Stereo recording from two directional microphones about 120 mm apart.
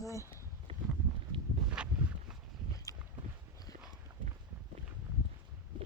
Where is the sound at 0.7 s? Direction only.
50° right (ahead or behind).